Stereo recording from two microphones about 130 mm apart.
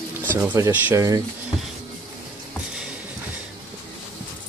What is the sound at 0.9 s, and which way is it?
Speech, 25° right (ahead or behind).